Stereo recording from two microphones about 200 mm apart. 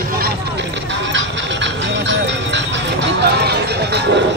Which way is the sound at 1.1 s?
65° right (ahead or behind).